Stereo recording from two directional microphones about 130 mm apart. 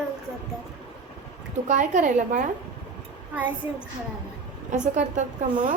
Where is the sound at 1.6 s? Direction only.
70° right (ahead or behind).